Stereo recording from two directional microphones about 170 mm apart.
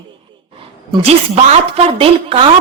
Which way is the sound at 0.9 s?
35° right (ahead or behind).